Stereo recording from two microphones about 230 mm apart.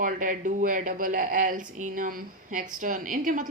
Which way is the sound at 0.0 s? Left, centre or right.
Right.